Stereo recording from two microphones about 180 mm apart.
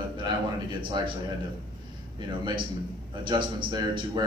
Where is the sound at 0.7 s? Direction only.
30° right (ahead or behind).